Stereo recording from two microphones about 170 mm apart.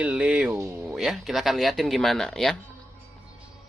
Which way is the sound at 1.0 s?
Centre (ahead or behind).